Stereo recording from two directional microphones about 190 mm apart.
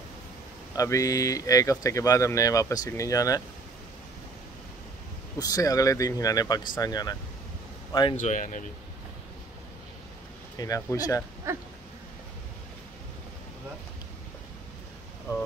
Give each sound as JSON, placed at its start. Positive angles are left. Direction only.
{"t": 0.7, "sound": "speech", "side_deg": 15}
{"t": 5.4, "sound": "speech", "side_deg": 20}
{"t": 8.2, "sound": "speech", "side_deg": 40}
{"t": 10.6, "sound": "speech", "side_deg": 15}
{"t": 11.5, "sound": "a sound", "side_deg": -15}